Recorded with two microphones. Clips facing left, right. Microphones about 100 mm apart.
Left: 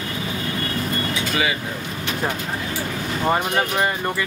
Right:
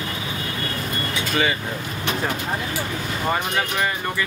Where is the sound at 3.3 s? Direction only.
25° left (ahead or behind).